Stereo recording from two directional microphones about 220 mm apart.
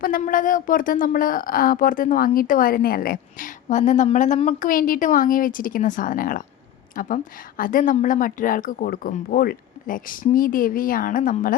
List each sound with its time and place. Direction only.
0.0 s a woman's voice: 40° left (ahead or behind)